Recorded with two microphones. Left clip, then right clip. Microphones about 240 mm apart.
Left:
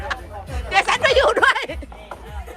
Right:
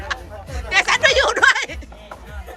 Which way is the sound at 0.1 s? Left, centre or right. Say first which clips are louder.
Even; centre.